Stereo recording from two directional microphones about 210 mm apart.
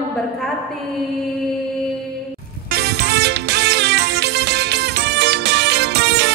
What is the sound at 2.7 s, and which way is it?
Music, 50° right (ahead or behind).